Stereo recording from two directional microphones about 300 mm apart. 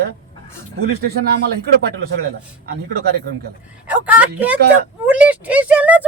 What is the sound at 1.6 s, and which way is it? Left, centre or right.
Speech, right.